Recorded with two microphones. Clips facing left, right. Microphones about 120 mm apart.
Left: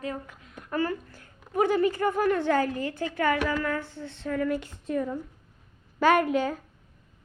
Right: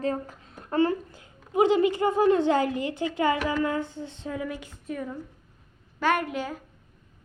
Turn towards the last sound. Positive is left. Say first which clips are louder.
# left 4 dB
turn(degrees=-5)  # may be behind; listen again after turning